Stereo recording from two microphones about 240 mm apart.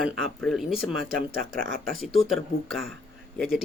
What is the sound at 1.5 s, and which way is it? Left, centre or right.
Speech, right.